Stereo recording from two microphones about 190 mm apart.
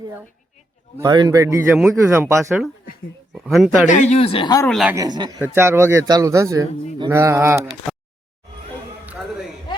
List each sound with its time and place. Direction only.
0.0 s speech: 10° right (ahead or behind)
3.3 s speech: centre (ahead or behind)
3.8 s speech: 40° left (ahead or behind)
4.6 s speech: centre (ahead or behind)
4.9 s speech: 20° right (ahead or behind)
9.0 s a sound: 10° right (ahead or behind)